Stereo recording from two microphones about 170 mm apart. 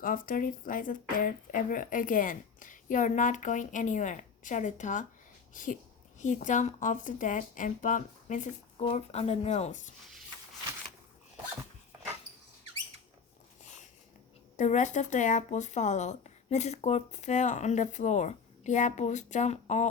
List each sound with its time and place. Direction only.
0.0 s speech: 55° left (ahead or behind)
8.8 s speech: 35° left (ahead or behind)
14.5 s speech: 45° left (ahead or behind)